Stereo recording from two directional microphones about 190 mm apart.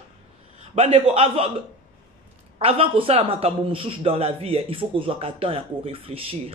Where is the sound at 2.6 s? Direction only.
30° right (ahead or behind).